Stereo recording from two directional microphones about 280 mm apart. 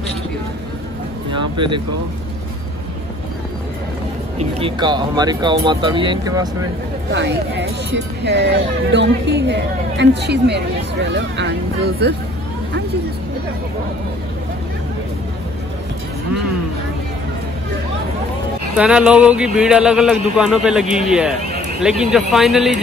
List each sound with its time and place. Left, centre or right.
1.6 s speech: centre
4.4 s speech: centre
7.1 s speech: right
18.8 s speech: centre